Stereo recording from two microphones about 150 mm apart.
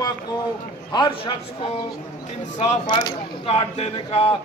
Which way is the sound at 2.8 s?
30° left (ahead or behind).